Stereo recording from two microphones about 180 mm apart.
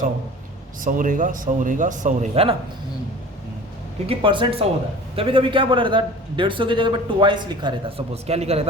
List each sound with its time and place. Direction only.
0.8 s a man's voice: 45° right (ahead or behind)
4.0 s a man's voice: 30° right (ahead or behind)